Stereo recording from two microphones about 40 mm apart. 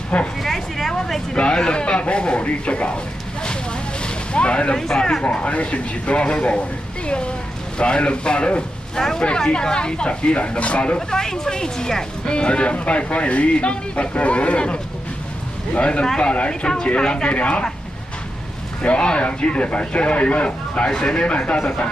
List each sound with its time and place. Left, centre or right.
0.4 s a sound: centre
1.3 s speech: left
4.0 s a sound: left
4.7 s speech: centre
5.3 s speech: left
7.8 s speech: left
8.9 s speech: centre
9.2 s speech: left
11.0 s speech: centre; by 17.6 s left
18.8 s speech: left